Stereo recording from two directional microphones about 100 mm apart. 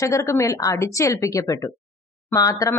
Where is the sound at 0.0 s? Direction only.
30° left (ahead or behind).